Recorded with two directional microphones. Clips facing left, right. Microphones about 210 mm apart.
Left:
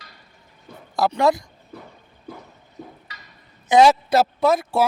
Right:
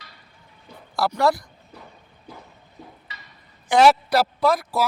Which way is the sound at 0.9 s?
20° left (ahead or behind).